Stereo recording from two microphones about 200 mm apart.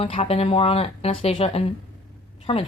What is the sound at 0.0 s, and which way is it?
Speech, 30° left (ahead or behind).